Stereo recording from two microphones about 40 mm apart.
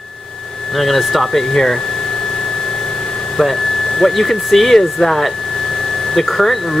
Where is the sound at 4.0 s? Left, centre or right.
Centre.